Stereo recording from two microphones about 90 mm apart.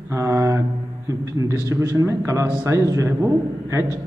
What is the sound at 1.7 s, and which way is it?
A man's voice, 35° right (ahead or behind).